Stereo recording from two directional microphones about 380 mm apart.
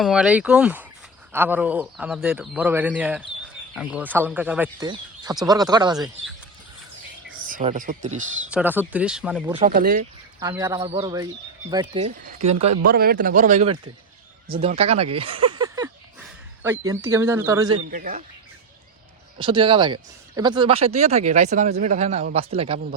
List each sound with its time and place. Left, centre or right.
0.0 s speech: centre
7.4 s speech: centre
8.4 s speech: centre
9.6 s speech: right
10.4 s speech: centre
17.9 s speech: right
19.4 s speech: centre